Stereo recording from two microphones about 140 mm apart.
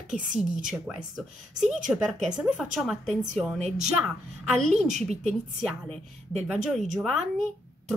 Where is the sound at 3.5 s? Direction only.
55° right (ahead or behind).